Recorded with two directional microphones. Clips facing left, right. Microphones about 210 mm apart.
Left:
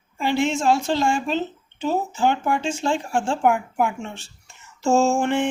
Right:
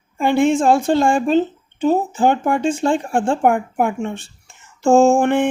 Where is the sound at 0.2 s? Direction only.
55° right (ahead or behind).